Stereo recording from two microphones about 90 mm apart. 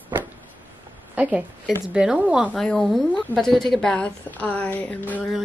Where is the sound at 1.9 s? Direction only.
10° right (ahead or behind).